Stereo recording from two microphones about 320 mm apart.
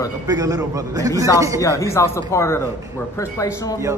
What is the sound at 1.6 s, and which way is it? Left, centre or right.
Speech, centre.